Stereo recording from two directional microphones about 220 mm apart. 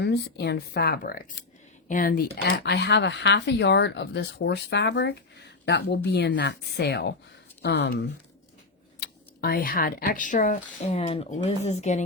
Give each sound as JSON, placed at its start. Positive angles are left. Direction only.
{"t": 0.0, "sound": "speech", "side_deg": 50}